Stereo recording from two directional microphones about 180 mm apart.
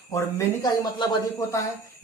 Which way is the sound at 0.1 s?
15° left (ahead or behind).